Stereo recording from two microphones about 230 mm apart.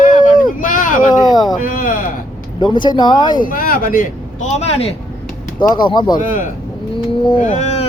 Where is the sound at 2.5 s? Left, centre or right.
Centre.